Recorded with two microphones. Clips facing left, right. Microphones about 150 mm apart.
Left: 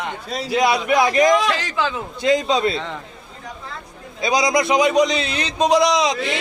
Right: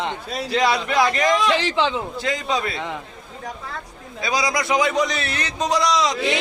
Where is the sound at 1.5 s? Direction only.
25° right (ahead or behind).